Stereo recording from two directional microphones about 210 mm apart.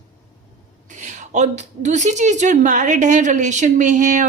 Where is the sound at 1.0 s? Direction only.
35° right (ahead or behind).